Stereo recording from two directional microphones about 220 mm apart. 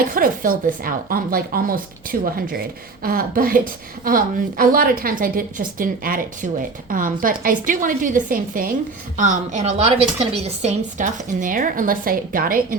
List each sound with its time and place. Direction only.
0.1 s a woman's voice: 40° right (ahead or behind)